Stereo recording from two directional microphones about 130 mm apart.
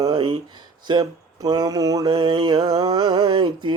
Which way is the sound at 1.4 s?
30° right (ahead or behind).